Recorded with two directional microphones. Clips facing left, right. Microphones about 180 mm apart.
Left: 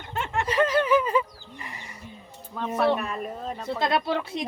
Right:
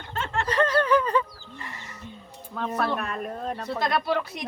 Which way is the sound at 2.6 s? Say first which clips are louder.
Left 3 dB; 5° left (ahead or behind).